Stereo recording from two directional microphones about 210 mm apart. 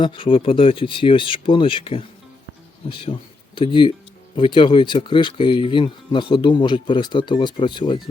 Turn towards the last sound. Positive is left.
turn(degrees=20)  # may be behind; listen again after turning